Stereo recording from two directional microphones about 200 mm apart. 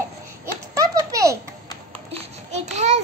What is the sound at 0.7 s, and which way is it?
Baby laughter, 15° right (ahead or behind).